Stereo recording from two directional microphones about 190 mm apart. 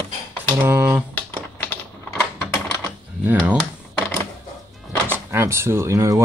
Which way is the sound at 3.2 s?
10° right (ahead or behind).